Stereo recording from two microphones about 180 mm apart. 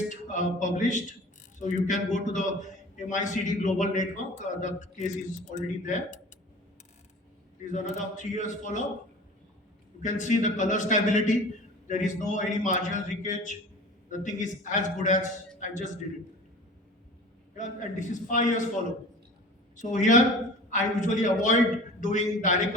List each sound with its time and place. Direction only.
0.1 s a man's voice: 45° left (ahead or behind)
7.6 s a man's voice: 45° left (ahead or behind)
10.0 s a man's voice: 45° left (ahead or behind)
17.6 s a man's voice: 45° left (ahead or behind)
19.7 s a man's voice: 45° left (ahead or behind)